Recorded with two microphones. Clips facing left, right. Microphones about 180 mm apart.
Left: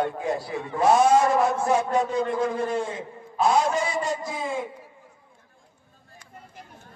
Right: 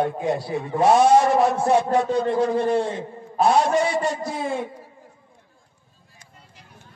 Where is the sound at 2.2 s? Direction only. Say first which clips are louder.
Right 4 dB; 35° right (ahead or behind).